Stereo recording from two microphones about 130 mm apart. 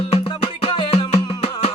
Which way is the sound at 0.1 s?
45° left (ahead or behind).